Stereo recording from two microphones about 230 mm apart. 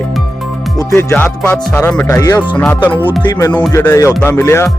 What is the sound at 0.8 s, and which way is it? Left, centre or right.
Speech, centre.